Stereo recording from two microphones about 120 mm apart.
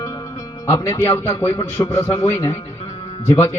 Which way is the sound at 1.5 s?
25° left (ahead or behind).